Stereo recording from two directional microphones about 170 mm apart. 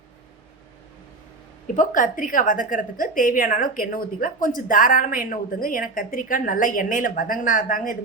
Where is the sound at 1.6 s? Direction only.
50° left (ahead or behind).